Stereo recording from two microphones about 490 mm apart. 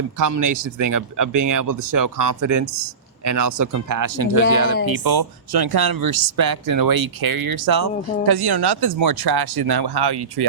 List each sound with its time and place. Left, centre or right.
0.2 s speech: right